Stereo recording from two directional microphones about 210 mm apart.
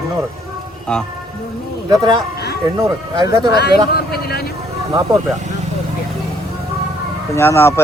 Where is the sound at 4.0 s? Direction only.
50° left (ahead or behind).